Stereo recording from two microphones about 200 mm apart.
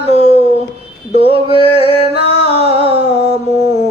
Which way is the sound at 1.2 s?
25° right (ahead or behind).